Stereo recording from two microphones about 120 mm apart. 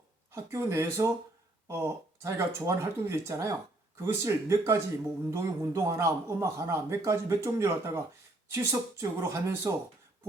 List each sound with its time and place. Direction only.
0.3 s speech: 20° right (ahead or behind)